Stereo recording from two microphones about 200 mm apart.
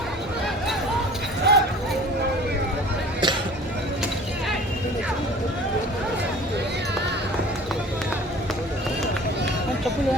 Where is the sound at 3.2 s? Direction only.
20° right (ahead or behind).